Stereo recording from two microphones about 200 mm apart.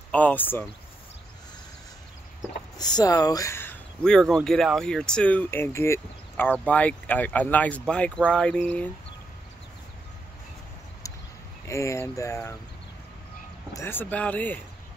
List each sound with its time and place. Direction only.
0.1 s speech: 10° left (ahead or behind)
2.8 s speech: 20° left (ahead or behind)
11.6 s speech: 15° left (ahead or behind)
13.7 s speech: 10° left (ahead or behind)